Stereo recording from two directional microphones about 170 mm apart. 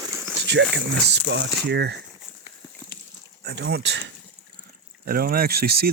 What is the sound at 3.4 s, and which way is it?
Speech, 85° right.